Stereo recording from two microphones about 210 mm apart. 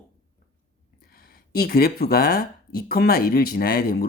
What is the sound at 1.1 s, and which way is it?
Speech, 45° left (ahead or behind).